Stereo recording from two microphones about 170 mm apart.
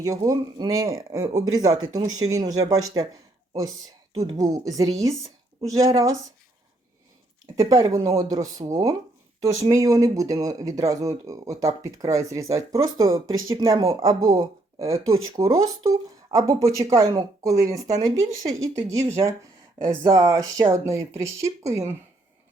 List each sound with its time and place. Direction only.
0.0 s speech: 20° right (ahead or behind)
4.4 s speech: 20° right (ahead or behind)
7.6 s speech: 20° right (ahead or behind)